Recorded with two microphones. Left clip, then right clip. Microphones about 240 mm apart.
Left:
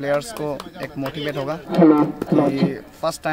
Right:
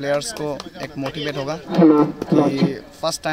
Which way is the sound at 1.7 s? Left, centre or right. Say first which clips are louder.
Right 1 dB; right.